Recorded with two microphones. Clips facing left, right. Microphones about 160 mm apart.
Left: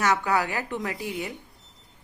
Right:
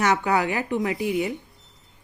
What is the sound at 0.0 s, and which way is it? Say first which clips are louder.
A woman's voice: right 2 dB; 20° right (ahead or behind).